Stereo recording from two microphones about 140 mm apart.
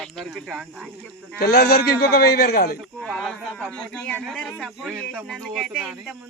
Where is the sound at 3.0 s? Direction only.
5° left (ahead or behind).